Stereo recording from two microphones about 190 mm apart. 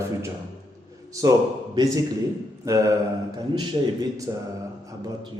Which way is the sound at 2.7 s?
15° right (ahead or behind).